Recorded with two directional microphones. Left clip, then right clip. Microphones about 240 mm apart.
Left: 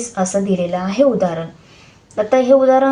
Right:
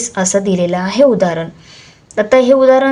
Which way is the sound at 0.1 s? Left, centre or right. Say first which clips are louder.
Right 3 dB; right.